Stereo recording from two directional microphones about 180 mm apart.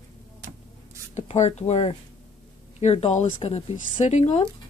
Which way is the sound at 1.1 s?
35° left (ahead or behind).